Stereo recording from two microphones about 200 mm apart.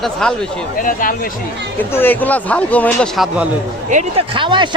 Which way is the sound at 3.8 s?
40° right (ahead or behind).